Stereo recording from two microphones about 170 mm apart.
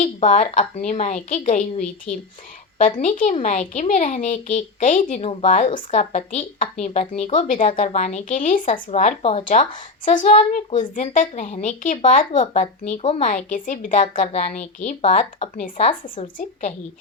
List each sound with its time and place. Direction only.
0.0 s a woman's voice: 40° left (ahead or behind)
3.0 s a woman's voice: 45° left (ahead or behind)
5.2 s a woman's voice: 35° left (ahead or behind)
9.5 s a woman's voice: 50° left (ahead or behind)
12.9 s a woman's voice: 35° left (ahead or behind)
13.2 s a woman's voice: 50° left (ahead or behind)
16.0 s a woman's voice: 50° left (ahead or behind)